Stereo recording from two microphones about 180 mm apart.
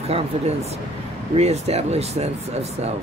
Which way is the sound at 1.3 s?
35° right (ahead or behind).